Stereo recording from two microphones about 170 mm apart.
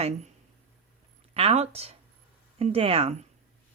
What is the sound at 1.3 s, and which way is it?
Speech, 35° right (ahead or behind).